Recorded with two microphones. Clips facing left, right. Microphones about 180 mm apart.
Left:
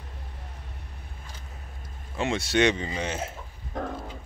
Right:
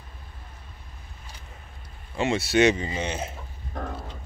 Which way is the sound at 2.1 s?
5° right (ahead or behind).